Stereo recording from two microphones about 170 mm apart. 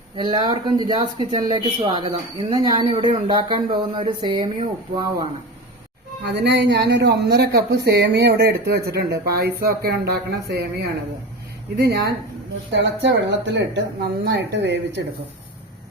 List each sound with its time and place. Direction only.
0.2 s speech: 25° right (ahead or behind)
6.2 s speech: 80° right
12.7 s a woman's voice: 90° right